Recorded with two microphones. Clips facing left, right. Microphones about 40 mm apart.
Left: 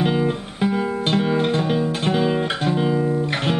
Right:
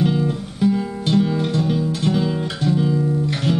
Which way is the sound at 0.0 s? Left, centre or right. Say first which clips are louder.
Even; left.